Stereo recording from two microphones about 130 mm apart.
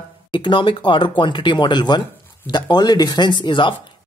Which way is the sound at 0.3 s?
40° left (ahead or behind).